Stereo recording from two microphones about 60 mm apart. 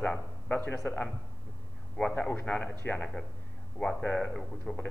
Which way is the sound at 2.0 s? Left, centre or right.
Left.